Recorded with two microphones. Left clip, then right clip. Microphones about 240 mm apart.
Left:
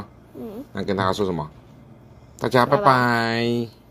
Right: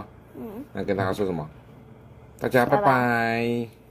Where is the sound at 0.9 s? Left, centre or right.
Left.